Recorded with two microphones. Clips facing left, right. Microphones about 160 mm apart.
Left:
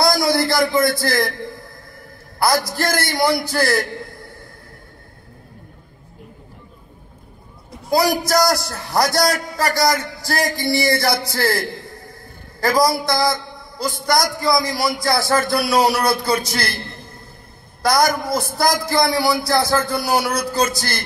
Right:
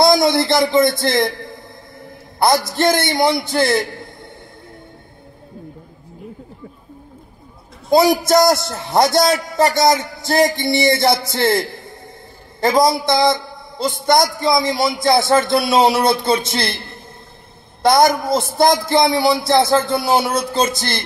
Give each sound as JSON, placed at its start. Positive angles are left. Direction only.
{"t": 0.0, "sound": "a man's voice", "side_deg": -25}
{"t": 2.6, "sound": "a man's voice", "side_deg": -25}
{"t": 7.9, "sound": "a man's voice", "side_deg": -25}
{"t": 17.8, "sound": "a man's voice", "side_deg": -25}